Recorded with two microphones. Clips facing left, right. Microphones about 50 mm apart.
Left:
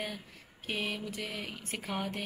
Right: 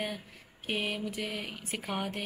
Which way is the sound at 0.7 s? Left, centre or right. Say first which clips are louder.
Right 2 dB; centre.